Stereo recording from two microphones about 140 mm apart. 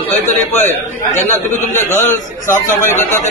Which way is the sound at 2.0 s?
65° left (ahead or behind).